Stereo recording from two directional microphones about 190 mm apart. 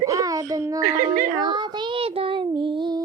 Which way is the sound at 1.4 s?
25° right (ahead or behind).